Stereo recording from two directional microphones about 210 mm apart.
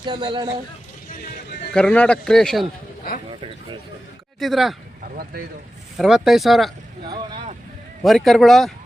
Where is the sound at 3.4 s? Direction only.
25° right (ahead or behind).